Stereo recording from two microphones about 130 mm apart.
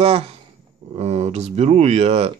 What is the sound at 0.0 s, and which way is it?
Speech, 50° right (ahead or behind).